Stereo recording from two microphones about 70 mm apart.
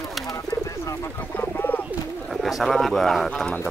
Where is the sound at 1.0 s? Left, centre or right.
Left.